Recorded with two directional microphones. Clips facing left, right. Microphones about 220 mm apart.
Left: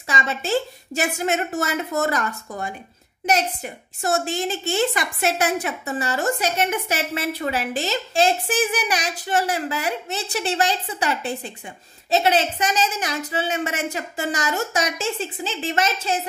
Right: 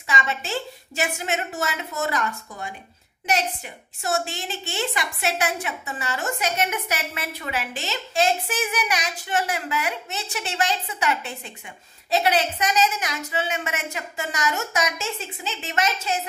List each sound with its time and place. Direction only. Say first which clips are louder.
0.0 s a woman's voice: left 2 dB; 40° left (ahead or behind)